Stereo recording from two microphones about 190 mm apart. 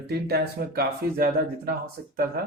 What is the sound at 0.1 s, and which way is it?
Speech, 55° right (ahead or behind).